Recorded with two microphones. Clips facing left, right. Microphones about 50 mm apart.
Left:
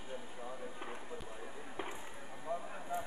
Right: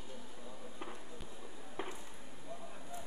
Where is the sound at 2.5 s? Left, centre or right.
Left.